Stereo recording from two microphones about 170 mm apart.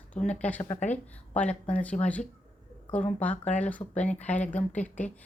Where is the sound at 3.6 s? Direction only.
10° left (ahead or behind).